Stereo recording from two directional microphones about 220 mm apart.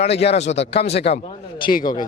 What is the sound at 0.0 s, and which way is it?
A man's voice, 30° left (ahead or behind).